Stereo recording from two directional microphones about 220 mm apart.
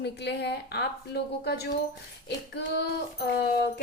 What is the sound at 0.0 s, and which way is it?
A woman's voice, 50° left (ahead or behind).